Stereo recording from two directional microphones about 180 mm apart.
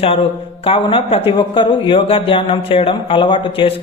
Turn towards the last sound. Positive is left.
turn(degrees=30)  # may be behind; listen again after turning